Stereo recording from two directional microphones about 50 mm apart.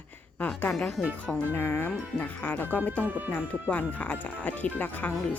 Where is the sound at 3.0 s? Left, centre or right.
Right.